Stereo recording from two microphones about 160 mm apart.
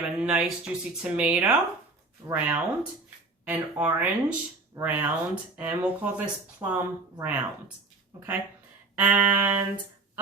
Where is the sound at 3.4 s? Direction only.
10° right (ahead or behind).